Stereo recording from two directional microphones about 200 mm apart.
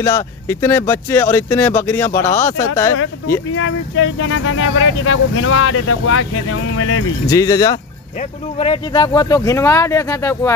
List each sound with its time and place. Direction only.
0.0 s speech: 15° left (ahead or behind)
3.5 s speech: 85° left
7.2 s speech: 15° left (ahead or behind)
8.2 s speech: 30° left (ahead or behind); by 10.5 s 15° left (ahead or behind)